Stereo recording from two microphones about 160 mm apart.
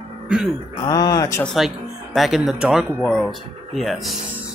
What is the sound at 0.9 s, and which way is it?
Speech, 20° left (ahead or behind).